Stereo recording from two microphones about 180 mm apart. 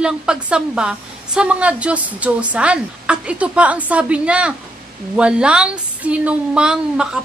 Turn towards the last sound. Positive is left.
turn(degrees=-5)  # may be behind; listen again after turning